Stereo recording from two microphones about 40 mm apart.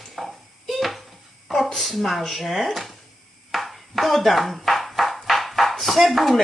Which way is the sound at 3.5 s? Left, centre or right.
Centre.